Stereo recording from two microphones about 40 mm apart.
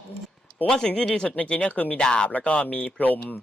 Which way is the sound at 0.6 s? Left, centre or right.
Centre.